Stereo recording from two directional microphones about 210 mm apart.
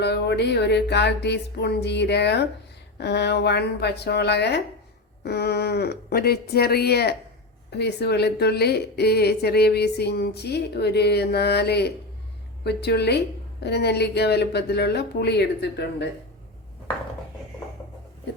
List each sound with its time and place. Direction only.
0.0 s a woman's voice: 55° left (ahead or behind)